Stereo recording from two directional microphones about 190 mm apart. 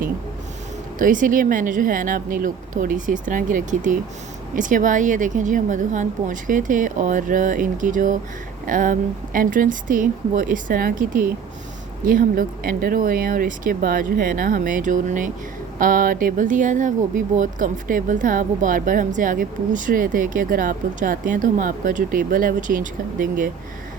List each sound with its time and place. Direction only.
0.9 s speech: 45° right (ahead or behind)